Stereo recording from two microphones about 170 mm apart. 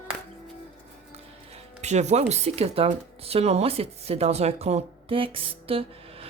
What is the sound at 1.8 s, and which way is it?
Speech, 40° right (ahead or behind).